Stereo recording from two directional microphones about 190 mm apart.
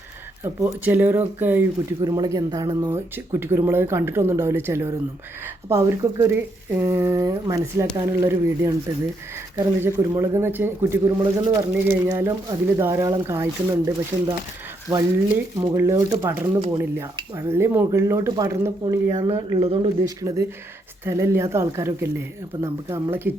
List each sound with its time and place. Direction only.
0.4 s speech: 15° right (ahead or behind)